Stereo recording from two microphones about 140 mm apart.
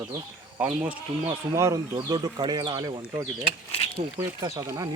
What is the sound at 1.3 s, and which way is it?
Speech, 20° right (ahead or behind).